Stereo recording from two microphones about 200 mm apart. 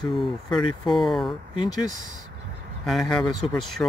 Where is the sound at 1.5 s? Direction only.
20° left (ahead or behind).